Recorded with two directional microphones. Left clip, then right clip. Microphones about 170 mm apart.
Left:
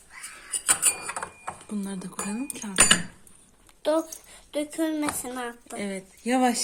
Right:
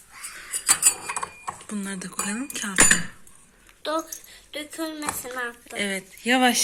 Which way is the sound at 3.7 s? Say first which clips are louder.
Left 3 dB; 90° left.